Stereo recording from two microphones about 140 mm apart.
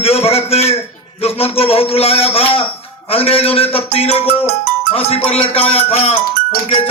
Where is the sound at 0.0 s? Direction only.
45° left (ahead or behind).